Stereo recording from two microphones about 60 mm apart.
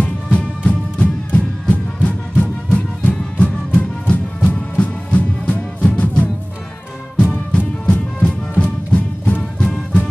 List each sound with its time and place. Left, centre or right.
0.0 s music: left